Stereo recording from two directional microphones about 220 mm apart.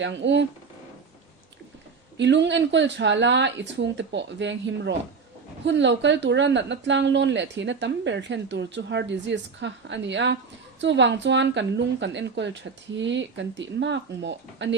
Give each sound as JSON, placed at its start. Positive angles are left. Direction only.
{"t": 0.0, "sound": "a woman's voice", "side_deg": -55}
{"t": 2.1, "sound": "a woman's voice", "side_deg": -55}